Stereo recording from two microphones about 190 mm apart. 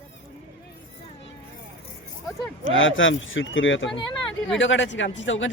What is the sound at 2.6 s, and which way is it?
Speech, 90° left.